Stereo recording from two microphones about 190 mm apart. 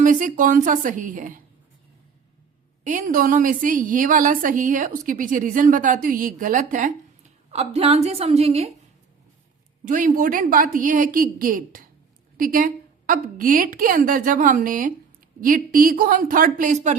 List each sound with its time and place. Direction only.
0.0 s a woman's voice: 45° right (ahead or behind)
2.8 s a woman's voice: 45° right (ahead or behind)
9.8 s a woman's voice: 45° right (ahead or behind)